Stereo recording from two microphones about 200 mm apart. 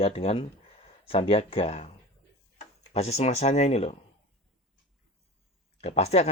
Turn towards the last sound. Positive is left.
turn(degrees=30)  # may be behind; listen again after turning